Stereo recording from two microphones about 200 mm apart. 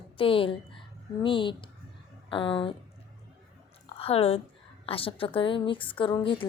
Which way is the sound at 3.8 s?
30° left (ahead or behind).